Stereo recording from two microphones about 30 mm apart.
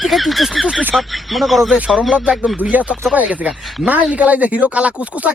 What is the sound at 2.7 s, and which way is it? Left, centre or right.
Speech, right.